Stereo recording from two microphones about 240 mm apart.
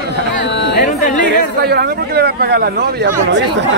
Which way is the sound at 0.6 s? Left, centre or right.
Left.